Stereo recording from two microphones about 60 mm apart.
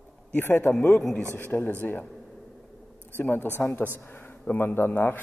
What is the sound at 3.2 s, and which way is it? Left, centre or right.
Speech, left.